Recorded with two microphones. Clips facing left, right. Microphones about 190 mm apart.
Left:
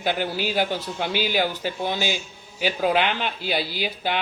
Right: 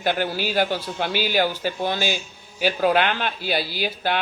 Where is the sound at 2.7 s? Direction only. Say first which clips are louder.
Right 1 dB; centre (ahead or behind).